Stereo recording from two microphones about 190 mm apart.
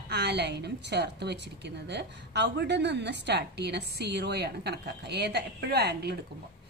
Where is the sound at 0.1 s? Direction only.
60° right (ahead or behind).